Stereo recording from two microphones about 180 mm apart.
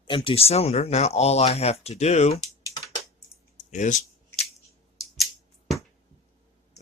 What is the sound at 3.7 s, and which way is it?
Speech, 45° left (ahead or behind).